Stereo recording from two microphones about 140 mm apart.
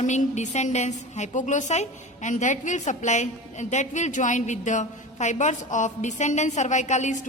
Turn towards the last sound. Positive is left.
turn(degrees=55)  # may be behind; listen again after turning